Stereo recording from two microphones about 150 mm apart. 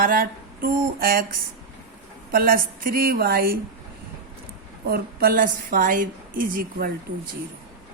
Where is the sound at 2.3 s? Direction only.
75° right (ahead or behind).